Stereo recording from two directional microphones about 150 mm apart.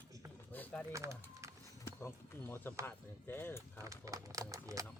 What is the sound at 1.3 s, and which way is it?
Music, 20° right (ahead or behind).